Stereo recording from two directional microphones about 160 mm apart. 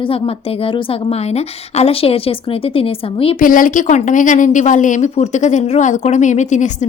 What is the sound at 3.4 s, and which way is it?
A woman's voice, 60° left (ahead or behind).